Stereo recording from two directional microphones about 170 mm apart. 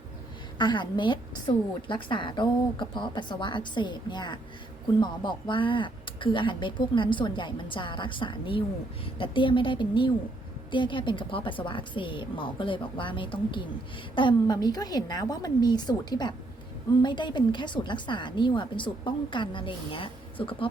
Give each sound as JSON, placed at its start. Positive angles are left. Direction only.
{"t": 0.6, "sound": "a woman's voice", "side_deg": 25}